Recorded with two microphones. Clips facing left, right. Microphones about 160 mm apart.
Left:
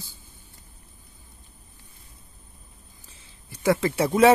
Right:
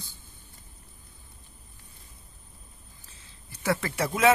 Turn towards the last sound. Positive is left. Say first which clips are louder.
# left 8 dB
turn(degrees=30)  # may be behind; listen again after turning